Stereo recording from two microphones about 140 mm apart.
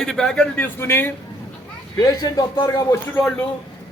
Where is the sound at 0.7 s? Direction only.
15° left (ahead or behind).